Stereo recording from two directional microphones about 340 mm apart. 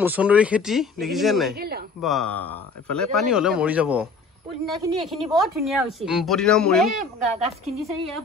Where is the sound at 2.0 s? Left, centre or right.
Centre.